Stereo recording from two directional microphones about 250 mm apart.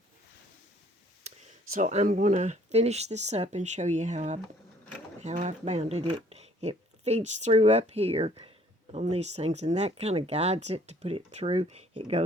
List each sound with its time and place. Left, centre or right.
1.7 s speech: right